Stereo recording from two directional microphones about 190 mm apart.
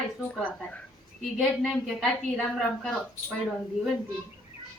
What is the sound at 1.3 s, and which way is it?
A woman's voice, centre (ahead or behind).